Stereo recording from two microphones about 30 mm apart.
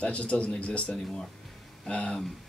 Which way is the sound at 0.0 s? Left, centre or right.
Left.